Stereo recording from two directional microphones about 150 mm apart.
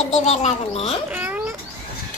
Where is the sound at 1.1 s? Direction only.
10° right (ahead or behind).